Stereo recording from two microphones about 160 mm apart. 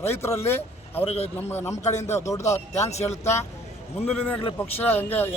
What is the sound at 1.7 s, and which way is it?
Speech, 45° left (ahead or behind).